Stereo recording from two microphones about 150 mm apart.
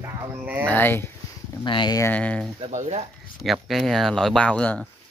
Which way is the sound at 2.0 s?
10° left (ahead or behind).